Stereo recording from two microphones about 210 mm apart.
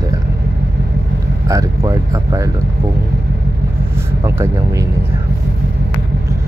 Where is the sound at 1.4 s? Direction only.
15° right (ahead or behind).